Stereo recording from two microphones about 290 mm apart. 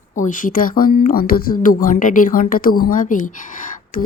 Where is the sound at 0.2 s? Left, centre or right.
Left.